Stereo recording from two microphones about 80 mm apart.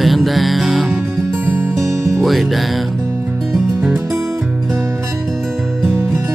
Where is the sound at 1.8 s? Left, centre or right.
Right.